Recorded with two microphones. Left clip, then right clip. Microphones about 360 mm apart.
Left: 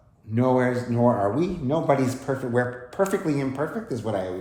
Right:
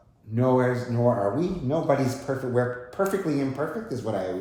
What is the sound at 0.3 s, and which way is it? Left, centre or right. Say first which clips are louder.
Speech: left 1 dB; left.